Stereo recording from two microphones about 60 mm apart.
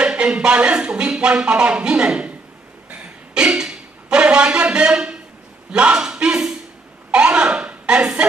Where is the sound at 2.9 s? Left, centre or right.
Centre.